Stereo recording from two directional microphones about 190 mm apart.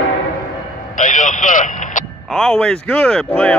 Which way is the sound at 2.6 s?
5° left (ahead or behind).